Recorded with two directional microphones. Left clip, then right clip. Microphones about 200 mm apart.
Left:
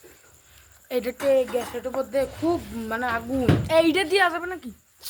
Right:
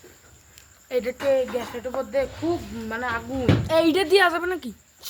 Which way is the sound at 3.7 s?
20° right (ahead or behind).